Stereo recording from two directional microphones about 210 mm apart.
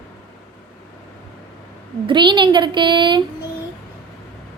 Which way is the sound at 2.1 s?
20° right (ahead or behind).